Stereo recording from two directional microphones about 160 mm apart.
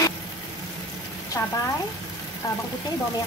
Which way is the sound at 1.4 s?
15° left (ahead or behind).